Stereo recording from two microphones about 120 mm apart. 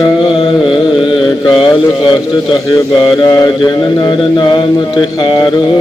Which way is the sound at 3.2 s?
35° left (ahead or behind).